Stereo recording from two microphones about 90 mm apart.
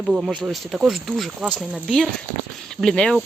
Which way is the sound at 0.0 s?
5° right (ahead or behind).